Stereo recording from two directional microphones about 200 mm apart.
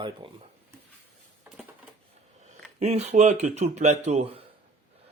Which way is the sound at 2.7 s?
35° right (ahead or behind).